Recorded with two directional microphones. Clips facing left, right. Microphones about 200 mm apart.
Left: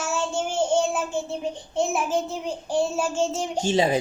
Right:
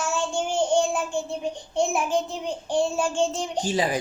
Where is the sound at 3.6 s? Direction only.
25° left (ahead or behind).